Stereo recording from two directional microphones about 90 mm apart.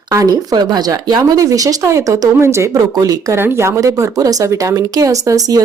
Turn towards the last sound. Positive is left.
turn(degrees=-40)  # may be behind; listen again after turning